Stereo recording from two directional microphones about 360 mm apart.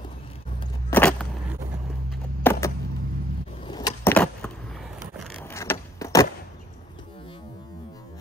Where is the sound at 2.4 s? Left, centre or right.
Centre.